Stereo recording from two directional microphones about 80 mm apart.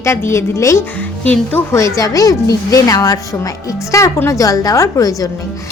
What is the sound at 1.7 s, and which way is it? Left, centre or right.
A woman's voice, left.